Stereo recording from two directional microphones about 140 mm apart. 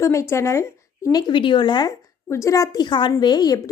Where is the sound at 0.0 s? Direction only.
20° left (ahead or behind).